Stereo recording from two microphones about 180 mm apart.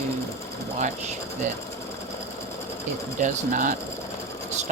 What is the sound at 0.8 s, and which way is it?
Speech, 40° right (ahead or behind).